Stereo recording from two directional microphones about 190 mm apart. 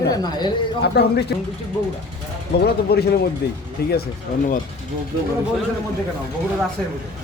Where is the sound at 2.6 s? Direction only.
55° left (ahead or behind).